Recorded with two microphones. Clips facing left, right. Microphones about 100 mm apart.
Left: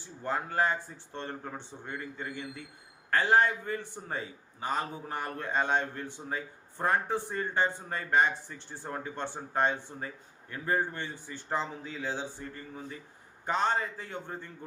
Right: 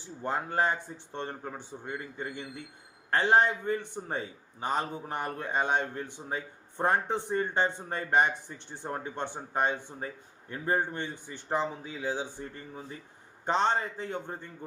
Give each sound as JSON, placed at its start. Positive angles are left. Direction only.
{"t": 0.0, "sound": "a man's voice", "side_deg": -20}